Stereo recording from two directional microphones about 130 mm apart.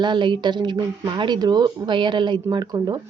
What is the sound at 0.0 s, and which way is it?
A woman's voice, 35° right (ahead or behind).